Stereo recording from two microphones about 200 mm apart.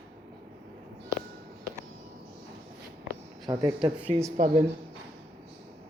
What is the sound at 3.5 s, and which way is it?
Speech, 20° right (ahead or behind).